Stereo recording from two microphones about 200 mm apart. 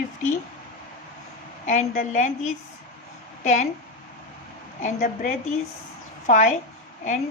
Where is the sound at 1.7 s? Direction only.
40° left (ahead or behind).